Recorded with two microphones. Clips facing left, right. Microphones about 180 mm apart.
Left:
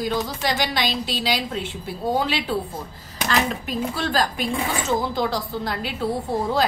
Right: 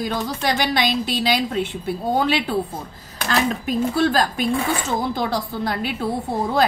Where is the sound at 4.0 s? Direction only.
50° right (ahead or behind).